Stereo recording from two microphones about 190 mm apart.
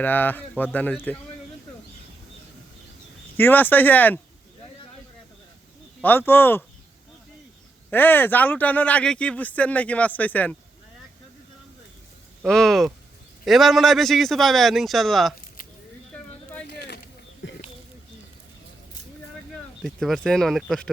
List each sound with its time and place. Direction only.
0.0 s speech: 10° left (ahead or behind)
3.3 s speech: 10° left (ahead or behind)
6.0 s speech: 10° left (ahead or behind)
7.9 s speech: 10° left (ahead or behind)
12.4 s a man's voice: 5° left (ahead or behind)
16.1 s a sound: 5° left (ahead or behind)
16.6 s a sound: 60° left (ahead or behind)
17.4 s a sound: 70° left (ahead or behind)
19.8 s a man's voice: centre (ahead or behind)